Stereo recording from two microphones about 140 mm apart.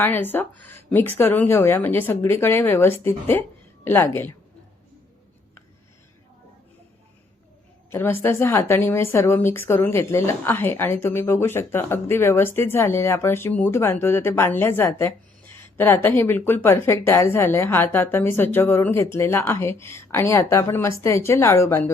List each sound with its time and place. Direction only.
0.0 s speech: 15° left (ahead or behind)
7.9 s speech: 15° left (ahead or behind)